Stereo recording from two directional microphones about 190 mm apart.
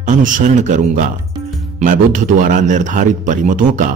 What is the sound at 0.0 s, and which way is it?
A man's voice, 45° right (ahead or behind).